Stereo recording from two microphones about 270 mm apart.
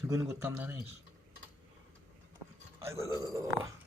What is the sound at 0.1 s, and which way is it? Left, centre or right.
Speech, centre.